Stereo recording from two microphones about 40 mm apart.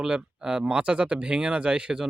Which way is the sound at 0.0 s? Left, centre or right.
Right.